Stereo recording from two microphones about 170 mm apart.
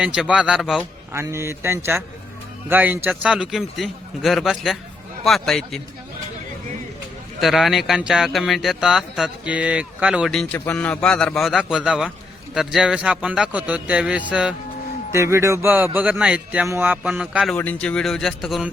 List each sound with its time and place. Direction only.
0.0 s speech: 5° right (ahead or behind)
1.1 s speech: 15° right (ahead or behind); by 5.8 s centre (ahead or behind)
7.4 s speech: centre (ahead or behind)
17.5 s speech: 5° left (ahead or behind)